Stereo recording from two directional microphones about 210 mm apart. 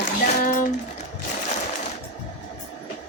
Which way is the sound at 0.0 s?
40° left (ahead or behind).